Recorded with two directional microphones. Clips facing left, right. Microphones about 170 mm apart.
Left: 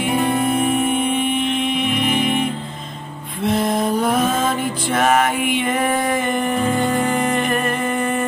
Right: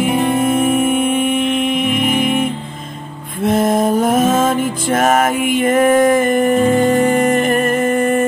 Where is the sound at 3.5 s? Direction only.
45° right (ahead or behind).